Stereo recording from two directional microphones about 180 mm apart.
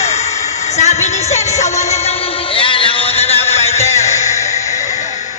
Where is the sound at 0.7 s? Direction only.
40° left (ahead or behind).